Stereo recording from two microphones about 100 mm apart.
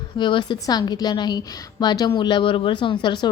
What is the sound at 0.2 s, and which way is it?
A woman's voice, 55° left (ahead or behind).